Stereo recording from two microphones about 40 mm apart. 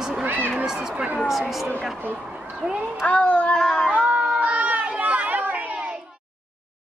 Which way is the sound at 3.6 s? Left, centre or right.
Centre.